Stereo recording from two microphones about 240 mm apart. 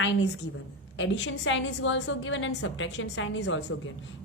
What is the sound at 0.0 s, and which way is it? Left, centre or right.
A woman's voice, left.